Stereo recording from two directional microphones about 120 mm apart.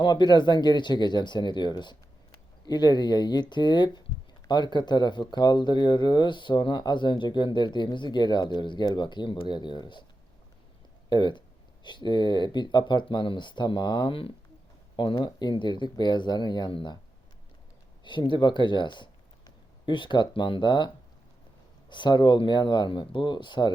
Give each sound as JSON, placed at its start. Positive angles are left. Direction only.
{"t": 0.0, "sound": "speech", "side_deg": 40}
{"t": 11.1, "sound": "speech", "side_deg": 40}
{"t": 18.0, "sound": "speech", "side_deg": 40}